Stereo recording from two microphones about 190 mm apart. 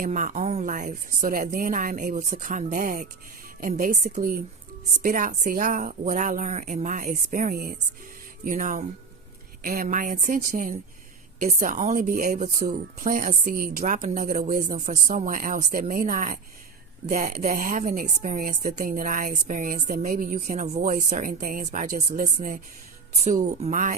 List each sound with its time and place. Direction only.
0.0 s a woman's voice: 45° right (ahead or behind)